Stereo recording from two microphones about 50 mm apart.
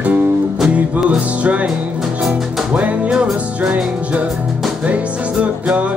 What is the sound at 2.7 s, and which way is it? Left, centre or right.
Music, right.